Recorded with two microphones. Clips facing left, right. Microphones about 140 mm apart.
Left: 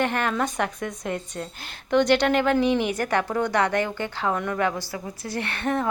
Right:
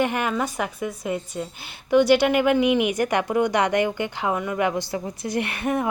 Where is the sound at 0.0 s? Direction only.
10° right (ahead or behind).